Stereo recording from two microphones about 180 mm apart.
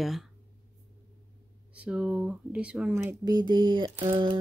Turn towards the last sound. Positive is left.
turn(degrees=-30)  # may be behind; listen again after turning